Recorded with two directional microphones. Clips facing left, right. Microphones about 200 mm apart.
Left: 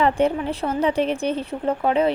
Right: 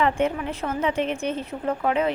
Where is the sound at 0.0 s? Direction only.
35° left (ahead or behind).